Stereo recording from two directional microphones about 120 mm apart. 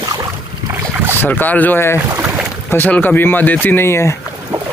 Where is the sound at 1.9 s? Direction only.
20° right (ahead or behind).